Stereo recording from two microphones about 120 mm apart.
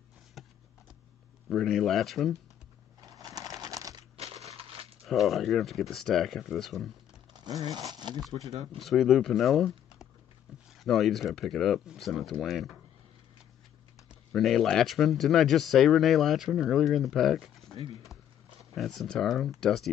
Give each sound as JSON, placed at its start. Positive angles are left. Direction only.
{"t": 0.4, "sound": "a sound", "side_deg": 0}
{"t": 1.5, "sound": "speech", "side_deg": 5}
{"t": 3.2, "sound": "a sound", "side_deg": -30}
{"t": 4.2, "sound": "crushing", "side_deg": -60}
{"t": 5.0, "sound": "speech", "side_deg": 0}
{"t": 7.3, "sound": "speech", "side_deg": -35}
{"t": 8.7, "sound": "speech", "side_deg": 0}
{"t": 14.3, "sound": "speech", "side_deg": 0}
{"t": 18.8, "sound": "speech", "side_deg": 0}